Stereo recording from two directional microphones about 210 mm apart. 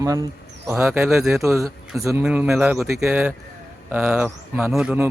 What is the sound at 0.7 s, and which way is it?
Speech, 10° right (ahead or behind).